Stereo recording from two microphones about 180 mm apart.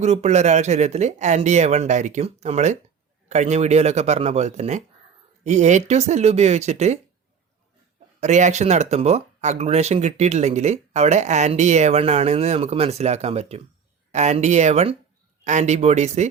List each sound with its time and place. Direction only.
0.0 s speech: 40° right (ahead or behind)
8.2 s speech: 40° right (ahead or behind)